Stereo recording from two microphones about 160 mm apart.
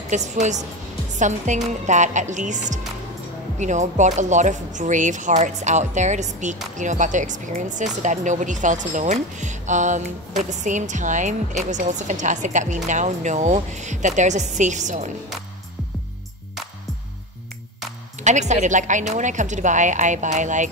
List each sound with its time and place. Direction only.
0.1 s speech: 45° right (ahead or behind)
18.2 s speech: 45° right (ahead or behind)